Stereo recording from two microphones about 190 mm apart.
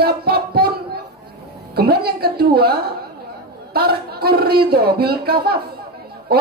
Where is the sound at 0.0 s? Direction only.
55° right (ahead or behind).